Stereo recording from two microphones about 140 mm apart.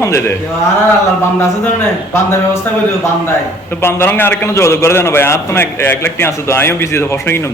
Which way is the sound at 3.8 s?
15° left (ahead or behind).